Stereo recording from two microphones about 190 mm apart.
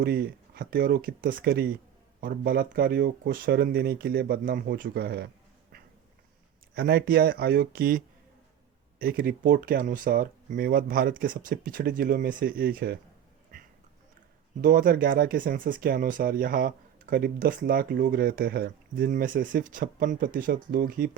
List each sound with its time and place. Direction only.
0.0 s speech: 55° right (ahead or behind)
6.7 s speech: 55° right (ahead or behind)
14.6 s speech: 45° right (ahead or behind)